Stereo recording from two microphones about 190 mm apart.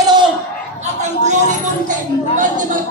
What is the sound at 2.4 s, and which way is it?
Speech, 45° right (ahead or behind).